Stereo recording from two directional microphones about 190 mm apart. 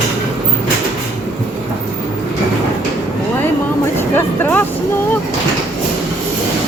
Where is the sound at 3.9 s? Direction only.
10° left (ahead or behind).